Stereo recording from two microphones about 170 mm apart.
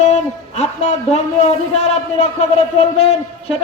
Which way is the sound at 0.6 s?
40° left (ahead or behind).